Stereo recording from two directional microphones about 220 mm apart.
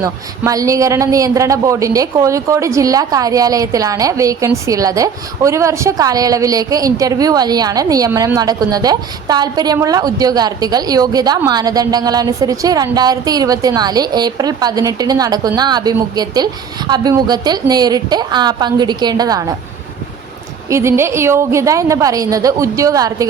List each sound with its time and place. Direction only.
0.0 s a woman's voice: 15° right (ahead or behind)
20.7 s a woman's voice: 10° right (ahead or behind)